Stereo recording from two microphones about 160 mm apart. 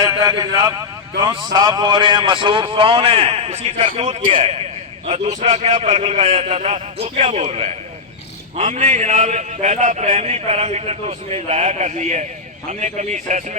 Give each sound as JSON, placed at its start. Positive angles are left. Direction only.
{"t": 0.0, "sound": "a man's voice", "side_deg": -20}